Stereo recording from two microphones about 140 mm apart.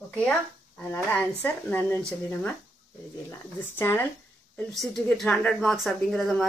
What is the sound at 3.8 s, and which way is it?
Speech, 15° left (ahead or behind).